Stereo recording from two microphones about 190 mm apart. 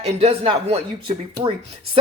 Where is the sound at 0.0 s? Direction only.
30° right (ahead or behind).